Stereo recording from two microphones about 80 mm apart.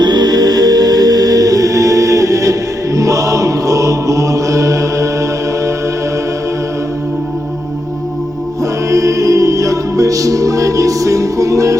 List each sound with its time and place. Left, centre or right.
0.0 s music: right
8.9 s music: right